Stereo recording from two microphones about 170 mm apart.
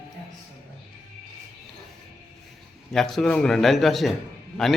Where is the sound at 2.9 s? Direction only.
5° left (ahead or behind).